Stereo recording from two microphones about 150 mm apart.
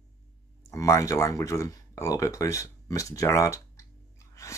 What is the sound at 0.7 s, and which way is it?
Speech, 20° left (ahead or behind).